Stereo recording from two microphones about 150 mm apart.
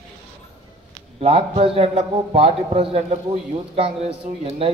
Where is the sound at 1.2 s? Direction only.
40° right (ahead or behind).